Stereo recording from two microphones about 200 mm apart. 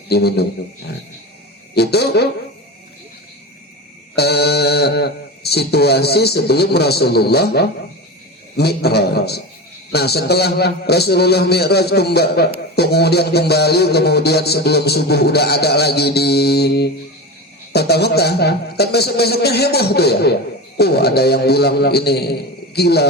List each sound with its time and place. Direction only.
0.1 s speech: 55° left (ahead or behind)
1.7 s speech: 55° left (ahead or behind)
4.1 s music: 55° left (ahead or behind)